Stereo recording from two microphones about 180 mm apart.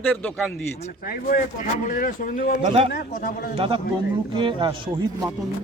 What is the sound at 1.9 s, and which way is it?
Speech, 50° left (ahead or behind).